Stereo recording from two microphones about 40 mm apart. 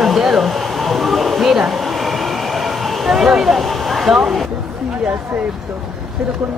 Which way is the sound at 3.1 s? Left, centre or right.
Centre.